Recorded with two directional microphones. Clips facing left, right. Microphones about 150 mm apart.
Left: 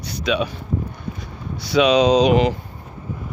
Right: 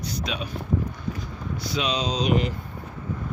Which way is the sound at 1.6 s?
75° left (ahead or behind).